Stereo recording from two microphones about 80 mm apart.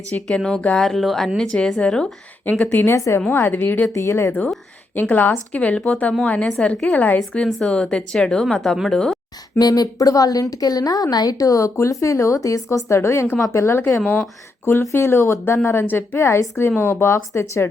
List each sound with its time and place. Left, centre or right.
0.1 s speech: centre
0.9 s speech: centre
2.4 s a woman's voice: centre
3.9 s a woman's voice: left
4.9 s a woman's voice: left; by 9.1 s centre
9.6 s a woman's voice: left
14.0 s a woman's voice: centre
14.6 s a woman's voice: left